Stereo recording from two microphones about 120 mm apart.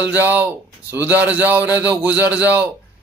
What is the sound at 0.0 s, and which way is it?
A man's voice, 15° right (ahead or behind).